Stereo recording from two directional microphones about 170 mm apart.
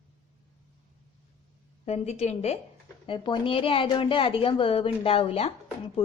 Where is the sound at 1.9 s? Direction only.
40° left (ahead or behind).